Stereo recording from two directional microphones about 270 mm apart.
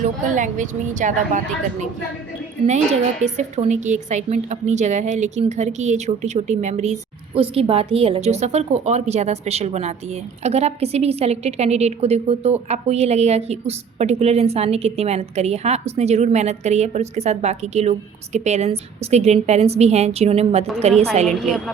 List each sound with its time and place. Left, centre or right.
0.0 s a woman's voice: right
3.3 s a woman's voice: right
21.2 s a woman's voice: centre